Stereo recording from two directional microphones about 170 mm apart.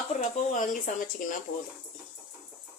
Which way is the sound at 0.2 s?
50° left (ahead or behind).